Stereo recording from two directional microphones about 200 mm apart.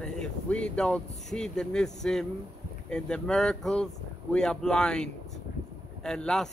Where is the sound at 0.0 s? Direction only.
5° left (ahead or behind).